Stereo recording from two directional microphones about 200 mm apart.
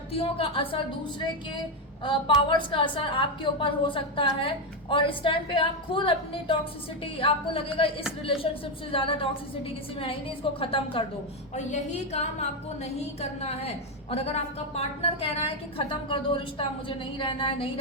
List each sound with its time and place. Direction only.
0.1 s a woman's voice: 30° left (ahead or behind)
8.9 s a woman's voice: 25° left (ahead or behind)